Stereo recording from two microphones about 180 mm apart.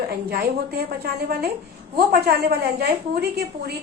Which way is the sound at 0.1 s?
60° right (ahead or behind).